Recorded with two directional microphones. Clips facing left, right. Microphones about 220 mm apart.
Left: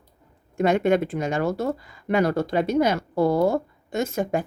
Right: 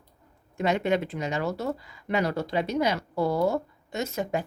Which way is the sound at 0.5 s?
50° left (ahead or behind).